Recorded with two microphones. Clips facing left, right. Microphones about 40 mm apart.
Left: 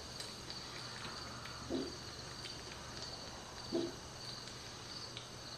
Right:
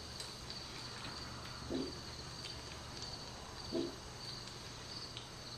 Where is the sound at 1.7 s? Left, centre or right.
Centre.